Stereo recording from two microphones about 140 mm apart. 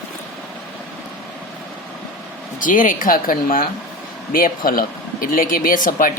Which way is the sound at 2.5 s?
70° left (ahead or behind).